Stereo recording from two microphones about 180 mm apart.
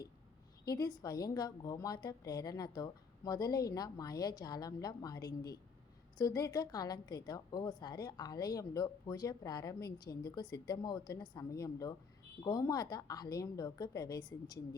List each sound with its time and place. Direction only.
0.7 s a woman's voice: 20° left (ahead or behind)